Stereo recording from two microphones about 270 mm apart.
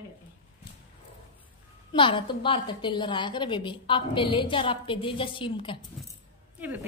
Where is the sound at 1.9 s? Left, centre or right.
Centre.